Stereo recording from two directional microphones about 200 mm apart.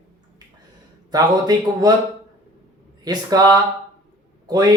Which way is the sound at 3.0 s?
20° right (ahead or behind).